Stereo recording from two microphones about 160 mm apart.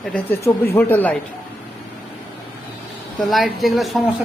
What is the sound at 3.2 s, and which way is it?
Speech, centre (ahead or behind).